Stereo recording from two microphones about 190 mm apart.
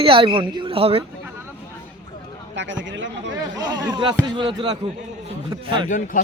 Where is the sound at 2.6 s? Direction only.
75° right (ahead or behind).